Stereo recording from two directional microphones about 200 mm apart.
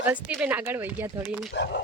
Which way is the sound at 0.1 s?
5° right (ahead or behind).